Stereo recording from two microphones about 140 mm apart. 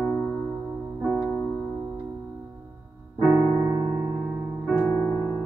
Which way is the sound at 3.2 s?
15° right (ahead or behind).